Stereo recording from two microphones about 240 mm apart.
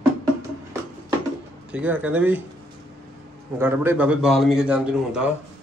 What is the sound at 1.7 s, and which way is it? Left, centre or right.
Speech, centre.